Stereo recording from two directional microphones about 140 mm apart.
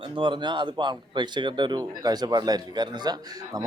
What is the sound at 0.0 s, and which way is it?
Speech, 35° right (ahead or behind).